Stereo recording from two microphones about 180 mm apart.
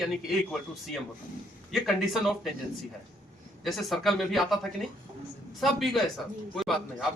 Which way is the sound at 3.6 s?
Centre (ahead or behind).